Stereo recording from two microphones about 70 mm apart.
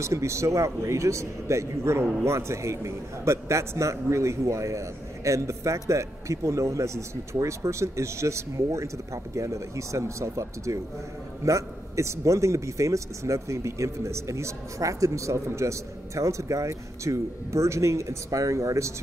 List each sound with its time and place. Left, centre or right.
0.0 s speech: right